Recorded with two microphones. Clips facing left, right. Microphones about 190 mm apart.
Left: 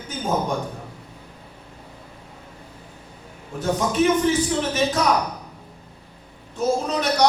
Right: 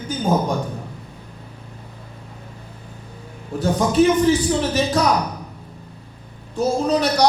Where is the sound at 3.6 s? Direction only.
35° right (ahead or behind).